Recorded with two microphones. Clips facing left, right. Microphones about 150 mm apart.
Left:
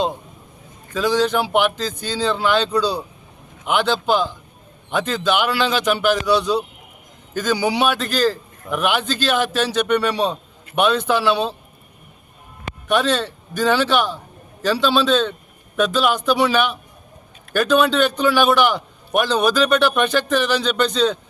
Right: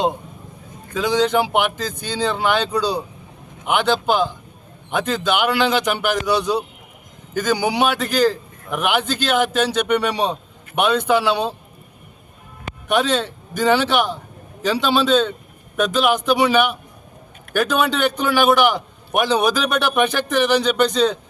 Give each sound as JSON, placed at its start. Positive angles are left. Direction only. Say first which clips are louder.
{"t": 0.9, "sound": "a man's voice", "louder": "right 1 dB", "side_deg": -15}
{"t": 12.9, "sound": "a man's voice", "louder": "even", "side_deg": -15}